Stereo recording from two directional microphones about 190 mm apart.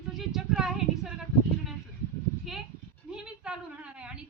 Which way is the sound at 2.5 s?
Centre (ahead or behind).